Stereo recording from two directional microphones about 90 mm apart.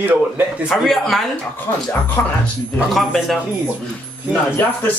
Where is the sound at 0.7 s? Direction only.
Centre (ahead or behind).